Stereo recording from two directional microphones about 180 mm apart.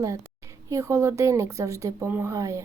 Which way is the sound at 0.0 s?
15° right (ahead or behind).